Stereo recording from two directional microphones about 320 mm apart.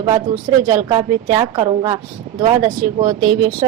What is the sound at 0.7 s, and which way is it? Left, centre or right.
Speech, centre.